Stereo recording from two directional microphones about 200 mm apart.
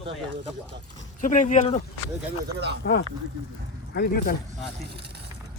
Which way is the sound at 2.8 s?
55° left (ahead or behind).